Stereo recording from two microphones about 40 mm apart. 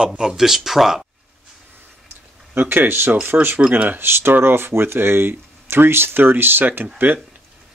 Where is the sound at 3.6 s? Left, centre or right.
Right.